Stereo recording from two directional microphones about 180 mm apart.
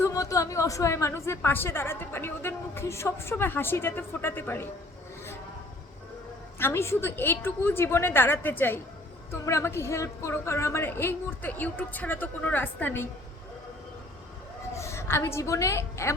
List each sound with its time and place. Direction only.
0.0 s speech: 20° left (ahead or behind)
6.6 s speech: 15° left (ahead or behind)
14.8 s a woman's voice: 15° left (ahead or behind)